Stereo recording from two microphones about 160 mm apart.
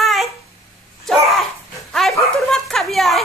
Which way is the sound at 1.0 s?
Centre (ahead or behind).